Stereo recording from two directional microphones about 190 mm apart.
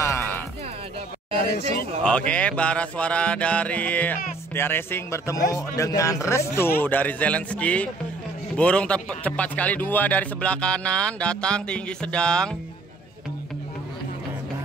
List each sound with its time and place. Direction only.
0.0 s music: 15° left (ahead or behind)
2.0 s speech: 5° left (ahead or behind)